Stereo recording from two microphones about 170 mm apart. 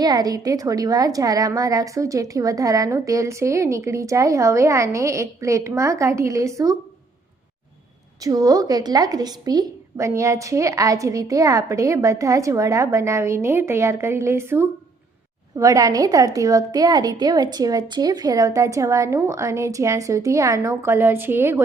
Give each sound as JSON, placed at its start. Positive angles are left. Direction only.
{"t": 0.0, "sound": "a woman's voice", "side_deg": -20}
{"t": 8.2, "sound": "a woman's voice", "side_deg": -20}